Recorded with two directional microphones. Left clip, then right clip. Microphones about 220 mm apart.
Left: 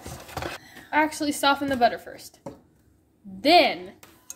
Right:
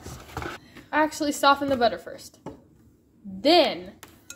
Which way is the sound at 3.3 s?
5° left (ahead or behind).